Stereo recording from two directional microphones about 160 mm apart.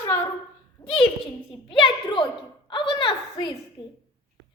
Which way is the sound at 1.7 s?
30° left (ahead or behind).